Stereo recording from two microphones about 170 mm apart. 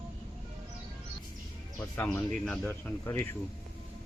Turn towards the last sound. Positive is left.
turn(degrees=10)  # may be behind; listen again after turning